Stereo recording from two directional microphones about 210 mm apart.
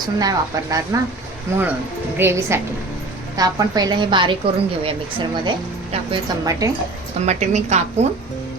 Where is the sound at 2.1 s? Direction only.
10° right (ahead or behind).